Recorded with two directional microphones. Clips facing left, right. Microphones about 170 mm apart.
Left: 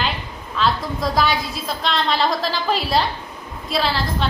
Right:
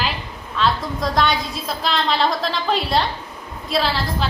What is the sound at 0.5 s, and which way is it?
A woman's voice, centre (ahead or behind).